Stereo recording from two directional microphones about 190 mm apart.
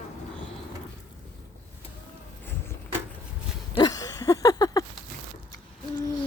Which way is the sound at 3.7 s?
20° left (ahead or behind).